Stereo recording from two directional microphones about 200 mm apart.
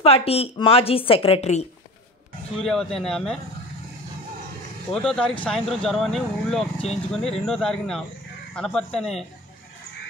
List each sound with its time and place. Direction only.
0.0 s a woman's voice: 30° left (ahead or behind)
2.6 s speech: centre (ahead or behind)
4.9 s speech: 5° left (ahead or behind)